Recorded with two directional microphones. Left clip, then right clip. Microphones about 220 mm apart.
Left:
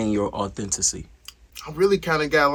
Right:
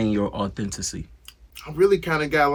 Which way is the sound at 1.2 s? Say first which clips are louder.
Left 2 dB; 15° left (ahead or behind).